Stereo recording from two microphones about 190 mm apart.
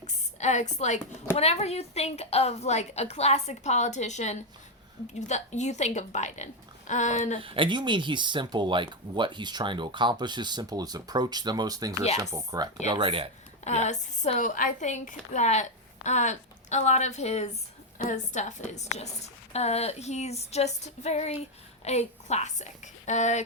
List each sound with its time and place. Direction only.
0.0 s a sound: 35° left (ahead or behind)
1.4 s a woman's voice: 35° left (ahead or behind)
7.4 s speech: 25° right (ahead or behind)
13.7 s a woman's voice: 35° left (ahead or behind)